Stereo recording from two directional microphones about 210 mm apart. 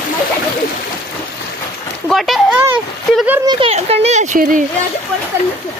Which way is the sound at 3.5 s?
25° right (ahead or behind).